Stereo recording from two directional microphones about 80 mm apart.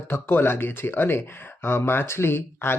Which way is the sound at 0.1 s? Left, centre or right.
Left.